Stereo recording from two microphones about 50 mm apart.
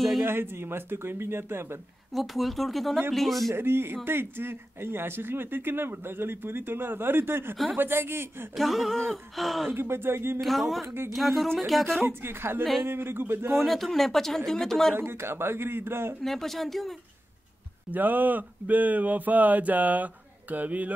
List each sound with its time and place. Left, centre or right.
0.2 s speech: right
2.1 s speech: centre
3.5 s speech: right
8.5 s speech: centre
9.7 s speech: right
10.4 s speech: centre
12.1 s speech: right
13.5 s a man's voice: centre
15.0 s speech: right
16.2 s speech: centre
17.9 s a sound: right